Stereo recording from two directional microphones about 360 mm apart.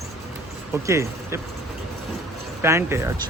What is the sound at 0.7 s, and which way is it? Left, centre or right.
Speech, centre.